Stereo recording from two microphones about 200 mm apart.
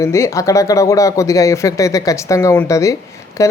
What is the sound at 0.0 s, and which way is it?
A man's voice, 15° left (ahead or behind).